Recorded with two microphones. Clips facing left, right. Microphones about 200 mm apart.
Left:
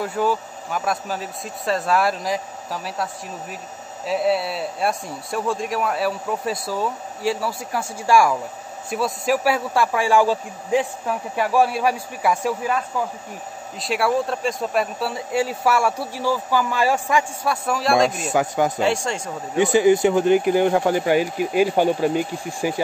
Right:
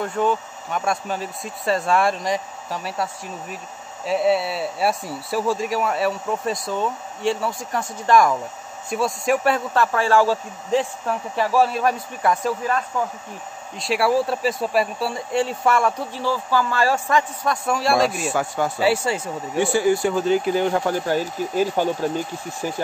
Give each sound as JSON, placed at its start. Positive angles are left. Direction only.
{"t": 0.0, "sound": "a man's voice", "side_deg": 5}
{"t": 18.3, "sound": "speech", "side_deg": 20}
{"t": 18.8, "sound": "speech", "side_deg": -5}
{"t": 19.5, "sound": "a man's voice", "side_deg": 20}